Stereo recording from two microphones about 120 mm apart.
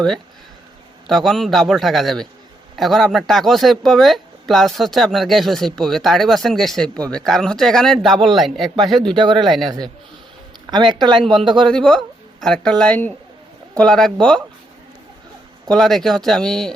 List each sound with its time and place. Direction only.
1.0 s speech: centre (ahead or behind)
9.1 s speech: 40° right (ahead or behind)
10.7 s speech: 40° right (ahead or behind)
11.7 s speech: 5° left (ahead or behind)
15.6 s speech: 5° left (ahead or behind)